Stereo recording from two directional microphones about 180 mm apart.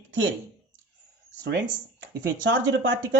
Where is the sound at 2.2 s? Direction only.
85° right.